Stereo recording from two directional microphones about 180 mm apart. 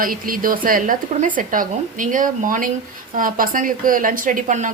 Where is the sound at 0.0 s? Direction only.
50° right (ahead or behind).